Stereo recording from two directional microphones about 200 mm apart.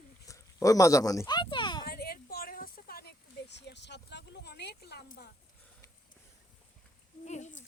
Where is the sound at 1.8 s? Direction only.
50° left (ahead or behind).